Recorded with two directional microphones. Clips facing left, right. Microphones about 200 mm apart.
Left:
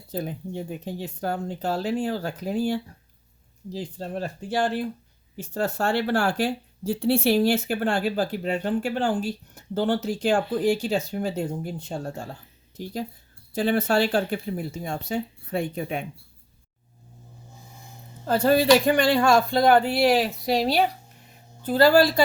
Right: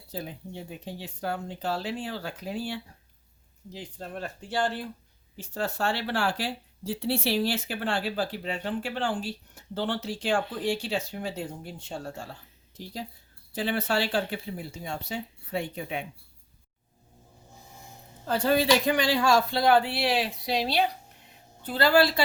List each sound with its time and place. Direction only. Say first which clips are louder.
0.1 s speech: left 7 dB; 50° left (ahead or behind)
5.4 s speech: left 4 dB; 45° left (ahead or behind)
18.3 s speech: left 5 dB; 50° left (ahead or behind)